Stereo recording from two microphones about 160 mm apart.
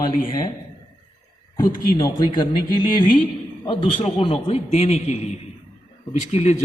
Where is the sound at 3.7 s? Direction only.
35° left (ahead or behind).